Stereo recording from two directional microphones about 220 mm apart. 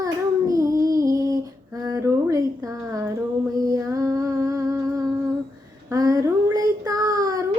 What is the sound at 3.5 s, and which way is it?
Female singing, 15° right (ahead or behind).